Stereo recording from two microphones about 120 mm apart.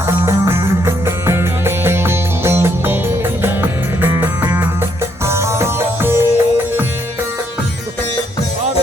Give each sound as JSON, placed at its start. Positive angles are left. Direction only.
{"t": 0.3, "sound": "music", "side_deg": -20}